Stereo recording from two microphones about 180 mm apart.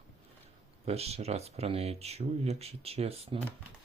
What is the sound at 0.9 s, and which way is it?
Speech, 35° right (ahead or behind).